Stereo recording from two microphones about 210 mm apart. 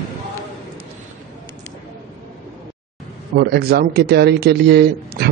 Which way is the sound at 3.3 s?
50° right (ahead or behind).